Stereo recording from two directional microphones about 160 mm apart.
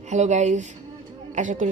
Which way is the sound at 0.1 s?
45° right (ahead or behind).